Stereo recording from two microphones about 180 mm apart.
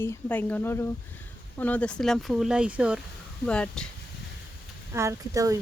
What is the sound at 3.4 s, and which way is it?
Speech, 5° left (ahead or behind).